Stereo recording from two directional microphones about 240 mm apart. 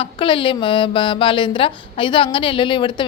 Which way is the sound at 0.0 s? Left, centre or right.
Left.